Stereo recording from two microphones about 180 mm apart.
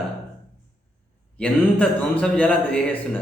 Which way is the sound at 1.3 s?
5° left (ahead or behind).